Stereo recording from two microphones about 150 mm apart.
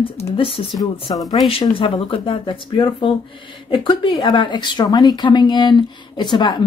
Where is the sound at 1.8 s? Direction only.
35° left (ahead or behind).